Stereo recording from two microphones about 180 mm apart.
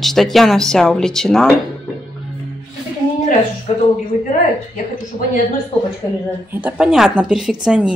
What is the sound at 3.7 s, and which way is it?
Speech, 35° left (ahead or behind).